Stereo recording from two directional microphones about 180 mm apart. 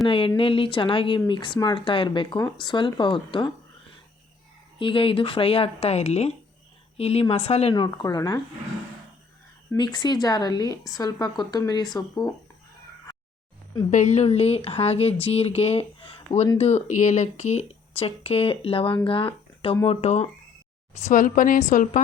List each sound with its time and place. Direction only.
0.1 s speech: 30° left (ahead or behind)
4.8 s speech: 30° left (ahead or behind)
9.7 s speech: 25° left (ahead or behind)
13.9 s speech: 40° left (ahead or behind)
21.1 s a woman's voice: 45° left (ahead or behind)